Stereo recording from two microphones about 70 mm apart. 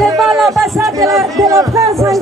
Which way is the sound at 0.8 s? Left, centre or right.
Right.